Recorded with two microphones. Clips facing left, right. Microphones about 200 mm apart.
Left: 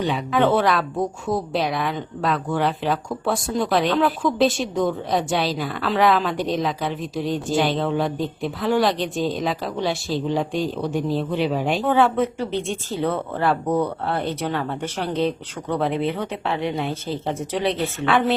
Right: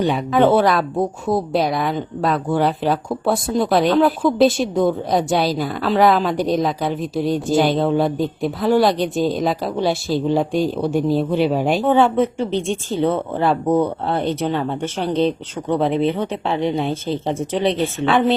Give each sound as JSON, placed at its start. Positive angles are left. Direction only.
{"t": 0.0, "sound": "a woman's voice", "side_deg": -45}
{"t": 11.1, "sound": "a man's voice", "side_deg": -10}
{"t": 11.3, "sound": "speech", "side_deg": -45}
{"t": 11.9, "sound": "speech", "side_deg": -25}